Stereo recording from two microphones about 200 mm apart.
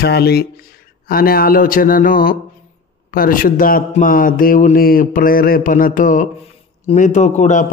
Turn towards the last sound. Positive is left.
turn(degrees=35)  # may be behind; listen again after turning